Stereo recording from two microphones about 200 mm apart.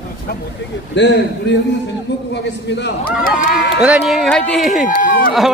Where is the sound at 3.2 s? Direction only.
40° left (ahead or behind).